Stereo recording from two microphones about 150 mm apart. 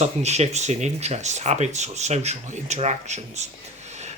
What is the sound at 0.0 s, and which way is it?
Speech, 50° right (ahead or behind).